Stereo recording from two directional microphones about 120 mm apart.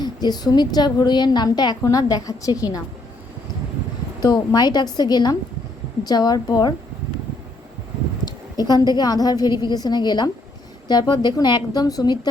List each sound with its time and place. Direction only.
0.0 s a woman's voice: 35° left (ahead or behind)
4.2 s a woman's voice: 35° left (ahead or behind)
8.2 s a woman's voice: 35° left (ahead or behind)